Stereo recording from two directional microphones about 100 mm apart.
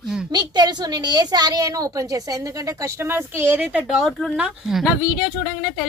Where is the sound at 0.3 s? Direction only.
45° right (ahead or behind); by 3.7 s 20° right (ahead or behind).